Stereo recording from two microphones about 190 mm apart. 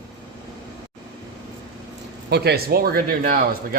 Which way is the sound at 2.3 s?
55° right (ahead or behind).